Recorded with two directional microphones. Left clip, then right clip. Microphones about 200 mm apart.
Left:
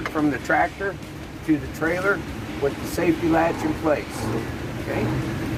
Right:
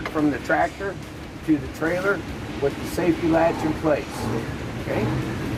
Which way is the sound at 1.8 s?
30° right (ahead or behind).